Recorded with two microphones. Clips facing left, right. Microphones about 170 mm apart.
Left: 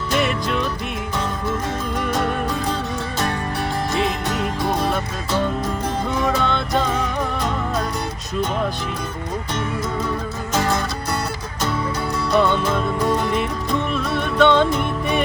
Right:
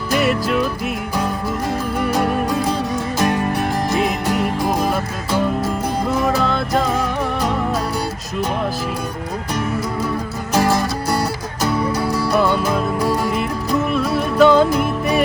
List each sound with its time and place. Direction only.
0.1 s music: 5° right (ahead or behind)
3.9 s music: 5° right (ahead or behind)
10.5 s music: 5° right (ahead or behind)